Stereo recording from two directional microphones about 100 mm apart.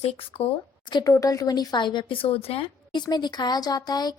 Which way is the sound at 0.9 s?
35° left (ahead or behind).